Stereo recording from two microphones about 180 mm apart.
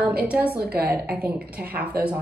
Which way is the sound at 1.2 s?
10° right (ahead or behind).